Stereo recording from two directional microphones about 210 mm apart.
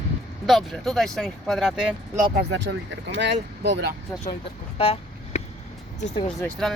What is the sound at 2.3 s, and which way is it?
Speech, 55° right (ahead or behind).